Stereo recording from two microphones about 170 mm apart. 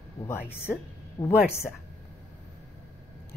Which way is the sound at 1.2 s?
30° left (ahead or behind).